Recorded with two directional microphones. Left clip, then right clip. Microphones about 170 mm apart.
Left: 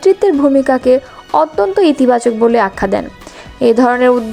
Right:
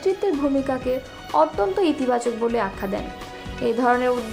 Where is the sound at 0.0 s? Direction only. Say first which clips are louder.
Left 12 dB; 45° left (ahead or behind).